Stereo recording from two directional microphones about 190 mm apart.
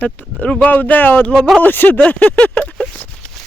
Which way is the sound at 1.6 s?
10° left (ahead or behind).